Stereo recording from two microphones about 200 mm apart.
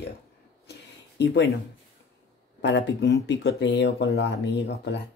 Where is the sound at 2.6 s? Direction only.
60° left (ahead or behind).